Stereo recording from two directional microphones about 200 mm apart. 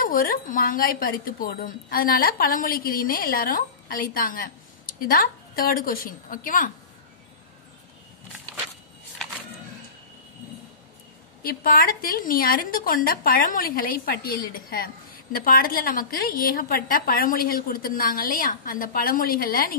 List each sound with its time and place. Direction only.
0.0 s a woman's voice: 45° left (ahead or behind)
11.4 s a woman's voice: 45° left (ahead or behind)